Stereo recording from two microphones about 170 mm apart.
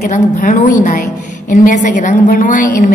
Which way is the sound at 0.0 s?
50° left (ahead or behind).